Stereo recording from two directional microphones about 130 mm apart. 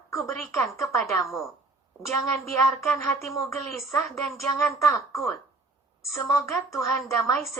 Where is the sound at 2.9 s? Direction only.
25° left (ahead or behind).